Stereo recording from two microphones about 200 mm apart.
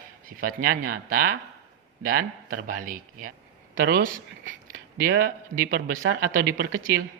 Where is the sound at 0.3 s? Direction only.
45° right (ahead or behind).